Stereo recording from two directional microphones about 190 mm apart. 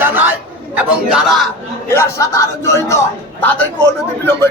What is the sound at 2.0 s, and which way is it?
Speech, 15° left (ahead or behind).